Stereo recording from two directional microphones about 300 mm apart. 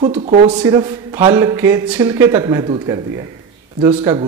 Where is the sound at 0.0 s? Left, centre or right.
Centre.